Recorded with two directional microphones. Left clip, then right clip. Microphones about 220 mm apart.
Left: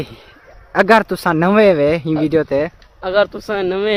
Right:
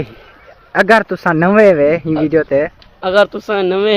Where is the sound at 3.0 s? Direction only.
5° left (ahead or behind).